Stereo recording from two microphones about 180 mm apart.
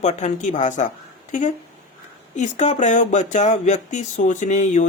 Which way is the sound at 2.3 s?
40° left (ahead or behind).